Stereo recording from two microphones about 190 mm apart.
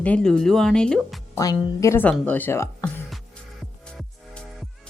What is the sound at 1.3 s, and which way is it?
A woman's voice, 15° left (ahead or behind).